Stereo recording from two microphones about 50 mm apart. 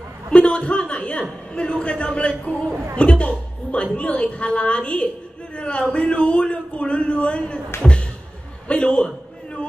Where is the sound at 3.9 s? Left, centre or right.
Left.